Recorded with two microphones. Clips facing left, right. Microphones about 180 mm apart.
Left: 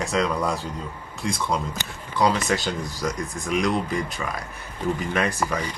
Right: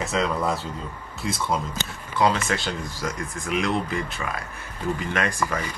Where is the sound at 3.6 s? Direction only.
15° left (ahead or behind).